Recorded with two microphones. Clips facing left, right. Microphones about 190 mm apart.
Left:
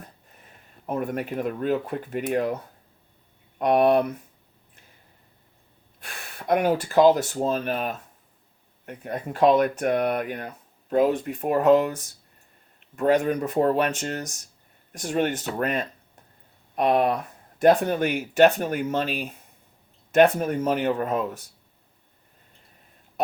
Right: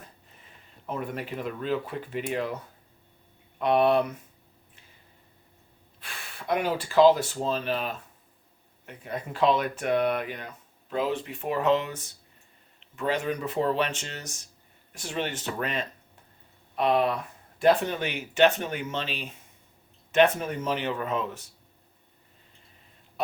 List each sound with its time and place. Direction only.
0.4 s speech: 50° left (ahead or behind)
3.6 s speech: 50° left (ahead or behind)
6.0 s speech: 50° left (ahead or behind)